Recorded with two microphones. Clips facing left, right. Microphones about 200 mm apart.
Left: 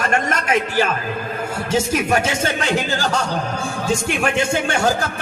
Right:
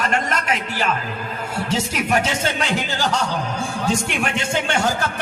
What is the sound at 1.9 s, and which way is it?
Speech, 45° left (ahead or behind).